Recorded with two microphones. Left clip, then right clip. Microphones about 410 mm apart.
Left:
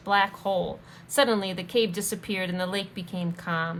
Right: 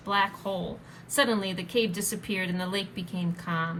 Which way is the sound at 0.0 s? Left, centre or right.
Centre.